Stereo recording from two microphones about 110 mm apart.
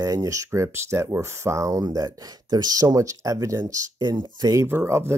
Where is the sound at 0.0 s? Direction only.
30° right (ahead or behind).